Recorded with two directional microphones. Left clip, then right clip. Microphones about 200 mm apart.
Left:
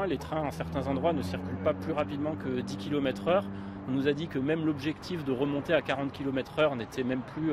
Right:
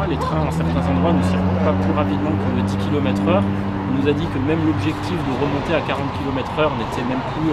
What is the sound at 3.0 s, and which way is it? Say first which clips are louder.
Speech: right 7 dB; 25° right (ahead or behind).